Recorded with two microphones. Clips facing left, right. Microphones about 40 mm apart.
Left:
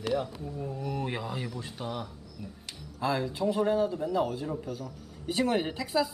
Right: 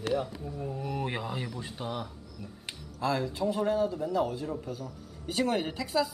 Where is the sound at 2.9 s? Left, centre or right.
Centre.